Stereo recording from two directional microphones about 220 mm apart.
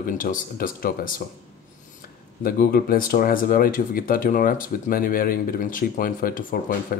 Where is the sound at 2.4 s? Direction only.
40° left (ahead or behind).